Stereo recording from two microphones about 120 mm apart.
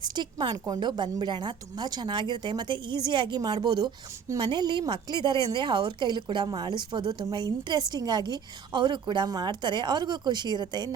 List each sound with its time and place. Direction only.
0.0 s a woman's voice: 35° right (ahead or behind)